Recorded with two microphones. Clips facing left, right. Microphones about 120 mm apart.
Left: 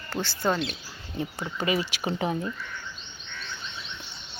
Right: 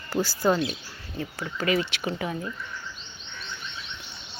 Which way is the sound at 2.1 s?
30° left (ahead or behind).